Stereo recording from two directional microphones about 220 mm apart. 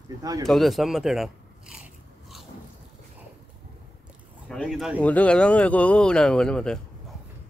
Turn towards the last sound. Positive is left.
turn(degrees=5)  # may be behind; listen again after turning